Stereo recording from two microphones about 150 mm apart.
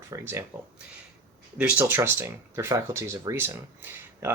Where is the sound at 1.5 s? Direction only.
10° right (ahead or behind).